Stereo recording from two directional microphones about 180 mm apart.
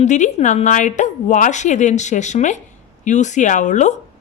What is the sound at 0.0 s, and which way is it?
A woman's voice, 40° left (ahead or behind).